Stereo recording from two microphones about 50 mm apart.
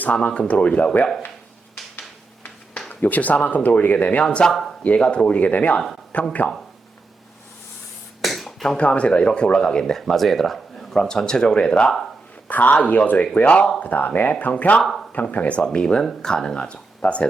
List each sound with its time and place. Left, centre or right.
0.0 s speech: left
2.9 s speech: left
4.2 s speech: centre; by 6.3 s left
8.2 s finger snapping: centre
8.8 s speech: left
12.5 s speech: left
14.8 s speech: centre
15.1 s speech: left
15.6 s speech: centre